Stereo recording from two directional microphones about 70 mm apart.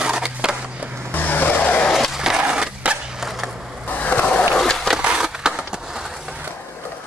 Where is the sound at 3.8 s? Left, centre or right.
Left.